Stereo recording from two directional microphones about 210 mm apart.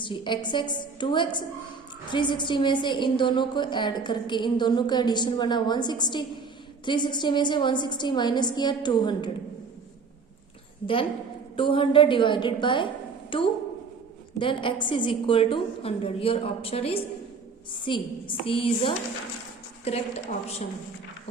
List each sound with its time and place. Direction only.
0.0 s a woman's voice: 20° left (ahead or behind)
11.5 s a woman's voice: 25° left (ahead or behind)